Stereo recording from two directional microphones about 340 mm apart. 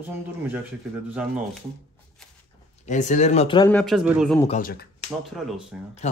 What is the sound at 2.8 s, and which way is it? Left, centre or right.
Speech, left.